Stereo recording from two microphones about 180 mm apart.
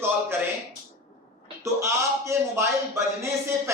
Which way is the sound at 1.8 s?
15° right (ahead or behind).